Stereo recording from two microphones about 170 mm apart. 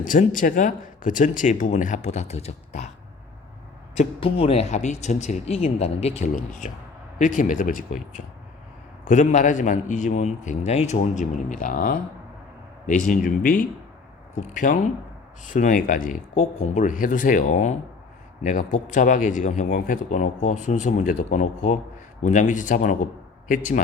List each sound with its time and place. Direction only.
0.0 s speech: 50° left (ahead or behind)
3.9 s speech: 35° left (ahead or behind); by 7.9 s 50° left (ahead or behind)
9.0 s speech: 45° left (ahead or behind)